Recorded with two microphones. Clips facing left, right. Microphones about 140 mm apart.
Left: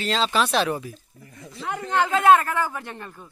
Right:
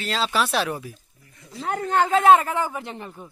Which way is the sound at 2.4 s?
15° right (ahead or behind).